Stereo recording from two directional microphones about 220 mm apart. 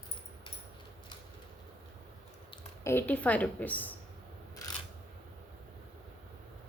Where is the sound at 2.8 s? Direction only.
10° left (ahead or behind).